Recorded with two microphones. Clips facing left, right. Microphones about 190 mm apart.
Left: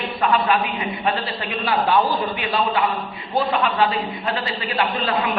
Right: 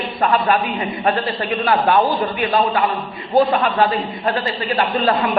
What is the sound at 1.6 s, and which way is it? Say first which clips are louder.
Speech: right 3 dB; 55° right (ahead or behind).